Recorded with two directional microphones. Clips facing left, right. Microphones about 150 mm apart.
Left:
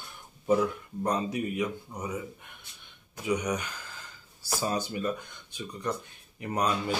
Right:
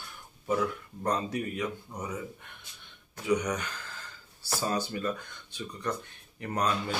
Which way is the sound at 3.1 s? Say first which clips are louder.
Right 1 dB; 15° left (ahead or behind).